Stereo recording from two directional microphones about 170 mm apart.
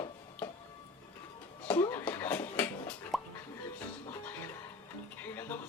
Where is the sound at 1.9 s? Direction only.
10° left (ahead or behind).